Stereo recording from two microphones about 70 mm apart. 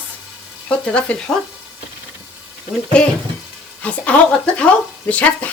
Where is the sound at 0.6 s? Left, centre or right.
Centre.